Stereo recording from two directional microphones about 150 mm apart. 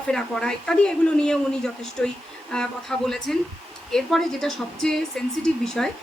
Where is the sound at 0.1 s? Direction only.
5° left (ahead or behind).